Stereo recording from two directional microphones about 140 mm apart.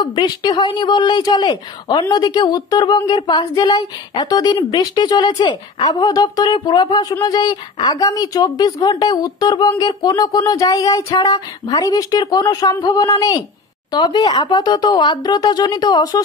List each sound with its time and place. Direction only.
0.0 s speech: 30° left (ahead or behind)